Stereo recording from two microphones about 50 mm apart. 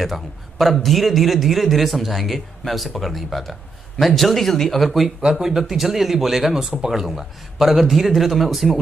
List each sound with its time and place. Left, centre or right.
0.0 s a man's voice: centre